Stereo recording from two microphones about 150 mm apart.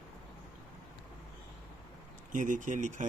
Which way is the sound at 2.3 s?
60° right (ahead or behind).